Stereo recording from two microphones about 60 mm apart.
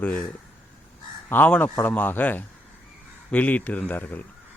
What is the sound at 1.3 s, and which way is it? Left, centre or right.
Speech, left.